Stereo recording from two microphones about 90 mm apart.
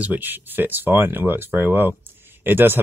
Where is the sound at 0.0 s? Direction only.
20° right (ahead or behind).